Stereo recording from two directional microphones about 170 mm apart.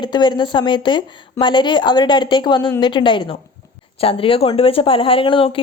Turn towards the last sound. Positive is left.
turn(degrees=30)  # may be behind; listen again after turning